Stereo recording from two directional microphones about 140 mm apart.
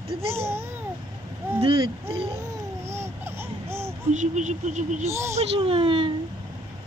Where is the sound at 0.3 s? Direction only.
20° right (ahead or behind).